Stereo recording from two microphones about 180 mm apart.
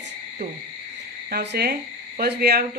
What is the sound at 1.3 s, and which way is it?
Speech, 65° right (ahead or behind).